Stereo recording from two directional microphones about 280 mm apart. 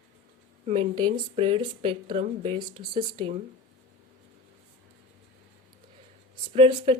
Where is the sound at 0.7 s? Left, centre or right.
Centre.